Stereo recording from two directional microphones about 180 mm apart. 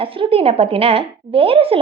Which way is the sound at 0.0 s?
30° right (ahead or behind).